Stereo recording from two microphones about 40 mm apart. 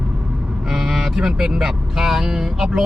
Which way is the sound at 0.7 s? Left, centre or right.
Centre.